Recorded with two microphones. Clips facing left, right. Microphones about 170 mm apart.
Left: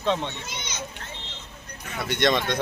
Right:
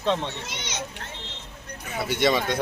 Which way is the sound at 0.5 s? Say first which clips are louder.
Right 1 dB; 80° right.